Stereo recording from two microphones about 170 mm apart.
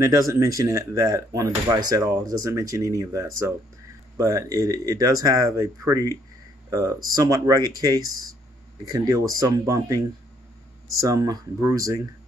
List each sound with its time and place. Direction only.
0.0 s speech: 15° right (ahead or behind)